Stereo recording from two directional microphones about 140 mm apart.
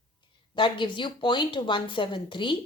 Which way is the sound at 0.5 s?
35° left (ahead or behind).